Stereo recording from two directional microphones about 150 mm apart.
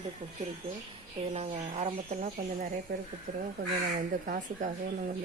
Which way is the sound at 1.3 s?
45° right (ahead or behind).